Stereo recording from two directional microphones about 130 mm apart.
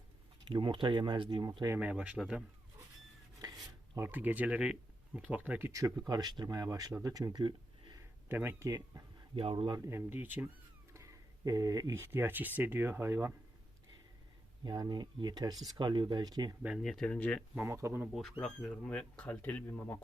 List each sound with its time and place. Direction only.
0.4 s speech: 40° right (ahead or behind)
1.8 s speech: 10° right (ahead or behind)
3.9 s speech: 15° right (ahead or behind)
7.4 s a sound: 35° right (ahead or behind)
8.3 s speech: 15° right (ahead or behind)
9.3 s speech: 45° right (ahead or behind)
9.7 s speech: 20° right (ahead or behind)
10.9 s speech: 25° right (ahead or behind)
14.6 s speech: 35° right (ahead or behind)
16.6 s speech: centre (ahead or behind)
17.7 s speech: 20° right (ahead or behind)
18.0 s speech: centre (ahead or behind)